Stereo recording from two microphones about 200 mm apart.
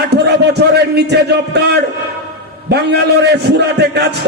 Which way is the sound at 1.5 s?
55° right (ahead or behind).